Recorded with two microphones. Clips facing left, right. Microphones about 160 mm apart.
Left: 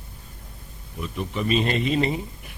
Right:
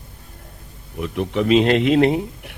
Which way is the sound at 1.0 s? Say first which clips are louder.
Right 7 dB; 75° right (ahead or behind).